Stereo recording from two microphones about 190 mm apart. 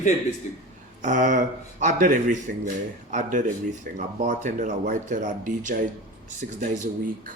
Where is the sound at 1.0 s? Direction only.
40° right (ahead or behind).